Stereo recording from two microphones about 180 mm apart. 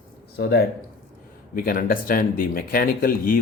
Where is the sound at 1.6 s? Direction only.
50° left (ahead or behind).